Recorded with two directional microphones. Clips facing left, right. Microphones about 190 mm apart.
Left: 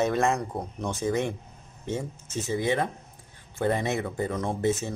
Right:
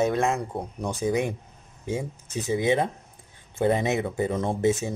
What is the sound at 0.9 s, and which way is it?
Speech, 15° right (ahead or behind).